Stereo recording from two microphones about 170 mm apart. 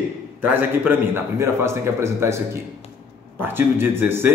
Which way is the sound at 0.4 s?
10° right (ahead or behind).